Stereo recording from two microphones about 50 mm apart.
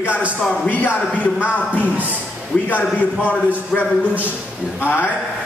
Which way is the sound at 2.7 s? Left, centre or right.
Left.